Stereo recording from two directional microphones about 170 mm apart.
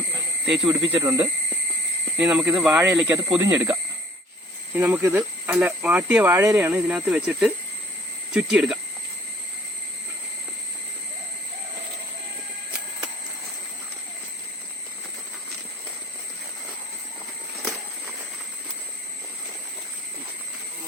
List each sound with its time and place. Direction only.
0.6 s speech: 25° right (ahead or behind)
2.1 s speech: 5° right (ahead or behind)
3.3 s speech: 15° right (ahead or behind)